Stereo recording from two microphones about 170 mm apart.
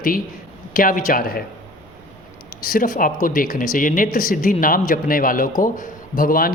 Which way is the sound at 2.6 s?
55° left (ahead or behind).